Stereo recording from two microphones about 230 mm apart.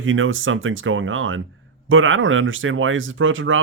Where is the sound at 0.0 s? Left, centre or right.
Right.